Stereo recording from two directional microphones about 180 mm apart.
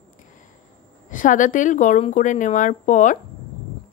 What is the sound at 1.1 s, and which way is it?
A woman's voice, 45° left (ahead or behind).